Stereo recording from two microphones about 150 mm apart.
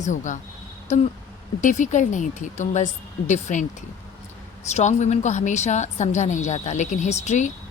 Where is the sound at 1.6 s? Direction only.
55° left (ahead or behind).